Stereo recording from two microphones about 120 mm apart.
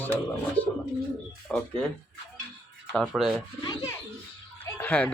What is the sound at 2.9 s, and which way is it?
Speech, 5° right (ahead or behind).